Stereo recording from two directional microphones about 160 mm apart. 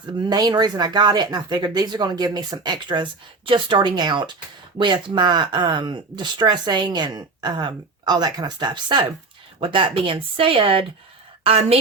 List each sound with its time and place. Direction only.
0.3 s speech: 25° right (ahead or behind)